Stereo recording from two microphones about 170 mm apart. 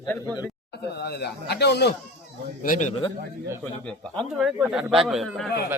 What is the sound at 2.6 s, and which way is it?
Speech, 50° left (ahead or behind).